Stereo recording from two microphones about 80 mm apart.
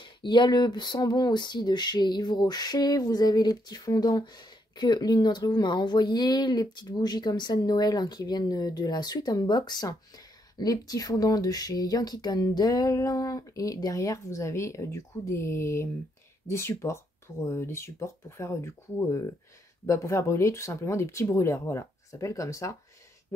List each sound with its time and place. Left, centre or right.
0.0 s speech: left